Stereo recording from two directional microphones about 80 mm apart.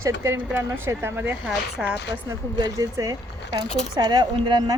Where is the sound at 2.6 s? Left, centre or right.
Right.